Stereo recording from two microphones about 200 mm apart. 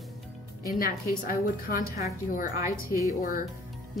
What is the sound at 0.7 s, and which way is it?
A woman's voice, 45° left (ahead or behind).